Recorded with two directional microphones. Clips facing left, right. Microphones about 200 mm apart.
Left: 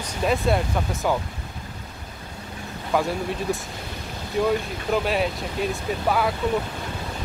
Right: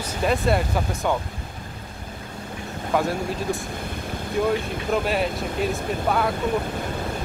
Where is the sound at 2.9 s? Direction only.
Centre (ahead or behind).